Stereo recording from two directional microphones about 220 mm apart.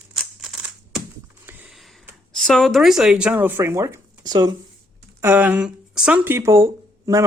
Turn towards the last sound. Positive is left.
turn(degrees=-15)  # may be behind; listen again after turning